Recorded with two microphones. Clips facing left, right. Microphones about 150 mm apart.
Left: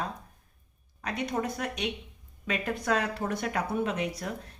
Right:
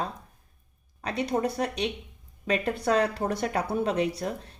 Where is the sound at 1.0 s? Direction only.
35° right (ahead or behind).